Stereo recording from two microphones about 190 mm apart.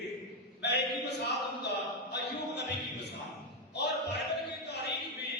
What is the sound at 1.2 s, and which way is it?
Music, 60° left (ahead or behind).